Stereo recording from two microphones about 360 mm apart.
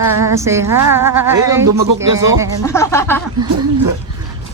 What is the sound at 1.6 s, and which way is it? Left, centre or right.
Speech, right.